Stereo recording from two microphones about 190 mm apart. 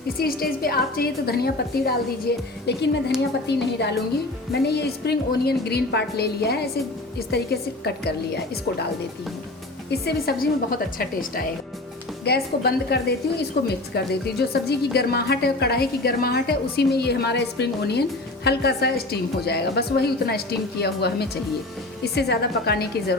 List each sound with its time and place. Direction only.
0.2 s a woman's voice: 50° left (ahead or behind)
9.9 s a woman's voice: 55° left (ahead or behind)